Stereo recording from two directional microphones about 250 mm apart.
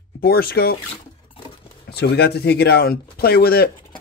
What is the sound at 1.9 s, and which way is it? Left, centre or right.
Speech, left.